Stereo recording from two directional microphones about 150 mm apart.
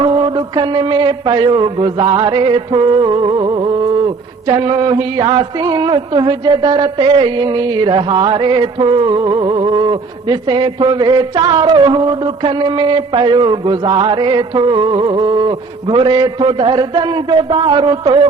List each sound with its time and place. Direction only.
0.0 s mantra: 30° right (ahead or behind)